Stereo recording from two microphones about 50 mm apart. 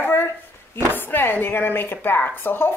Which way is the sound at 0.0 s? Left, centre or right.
Left.